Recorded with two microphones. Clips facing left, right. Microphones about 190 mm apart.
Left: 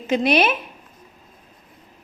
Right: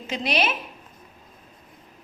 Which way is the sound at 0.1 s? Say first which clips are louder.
Left 7 dB; 55° left (ahead or behind).